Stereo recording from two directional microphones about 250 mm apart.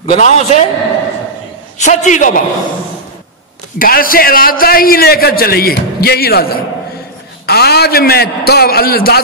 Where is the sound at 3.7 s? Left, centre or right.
Left.